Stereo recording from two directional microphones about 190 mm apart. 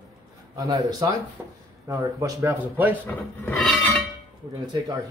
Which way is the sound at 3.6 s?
Centre (ahead or behind).